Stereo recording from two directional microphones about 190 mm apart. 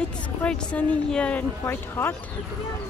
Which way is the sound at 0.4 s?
5° left (ahead or behind).